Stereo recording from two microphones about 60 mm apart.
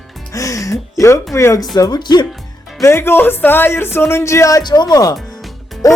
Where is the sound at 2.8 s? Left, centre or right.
Left.